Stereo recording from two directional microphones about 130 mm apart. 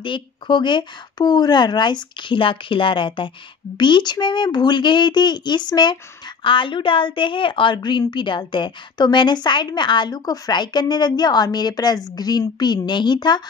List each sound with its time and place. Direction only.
0.0 s a woman's voice: 40° left (ahead or behind)